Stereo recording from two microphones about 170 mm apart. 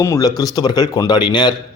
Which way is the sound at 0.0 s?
20° left (ahead or behind).